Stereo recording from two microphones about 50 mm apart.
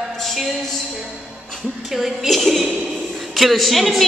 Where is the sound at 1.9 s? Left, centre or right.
Centre.